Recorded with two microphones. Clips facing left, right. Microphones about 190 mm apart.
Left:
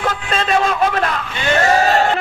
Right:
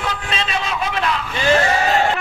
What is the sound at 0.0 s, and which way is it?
Vehicle, 50° left (ahead or behind).